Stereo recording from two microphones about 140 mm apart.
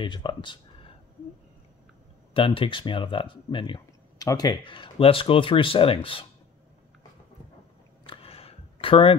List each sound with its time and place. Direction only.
0.0 s speech: 35° left (ahead or behind)
2.3 s speech: 40° left (ahead or behind)
8.0 s a sound: 40° left (ahead or behind)